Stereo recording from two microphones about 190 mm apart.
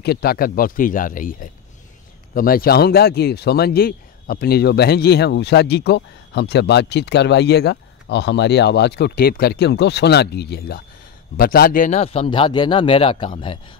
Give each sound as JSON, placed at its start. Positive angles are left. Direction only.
{"t": 0.0, "sound": "speech", "side_deg": 55}